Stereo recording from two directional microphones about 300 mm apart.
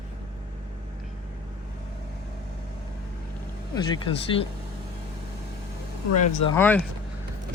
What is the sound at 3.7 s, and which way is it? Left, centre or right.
Speech, centre.